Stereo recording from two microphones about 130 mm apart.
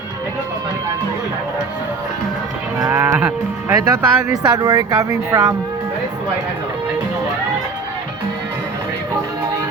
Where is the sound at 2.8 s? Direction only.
20° right (ahead or behind).